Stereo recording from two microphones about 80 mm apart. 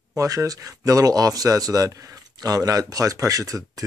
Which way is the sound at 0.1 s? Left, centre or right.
Right.